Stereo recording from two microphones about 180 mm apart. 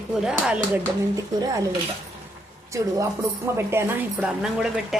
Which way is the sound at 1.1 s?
20° right (ahead or behind).